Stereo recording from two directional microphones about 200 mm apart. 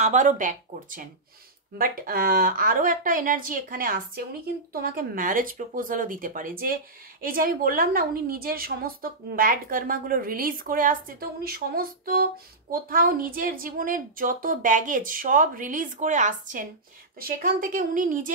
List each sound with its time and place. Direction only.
0.0 s a woman's voice: 40° right (ahead or behind)